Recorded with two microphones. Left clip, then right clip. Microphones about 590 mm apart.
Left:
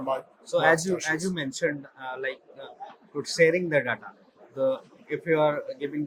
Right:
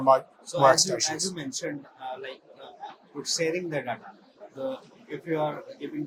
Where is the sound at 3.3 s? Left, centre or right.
Left.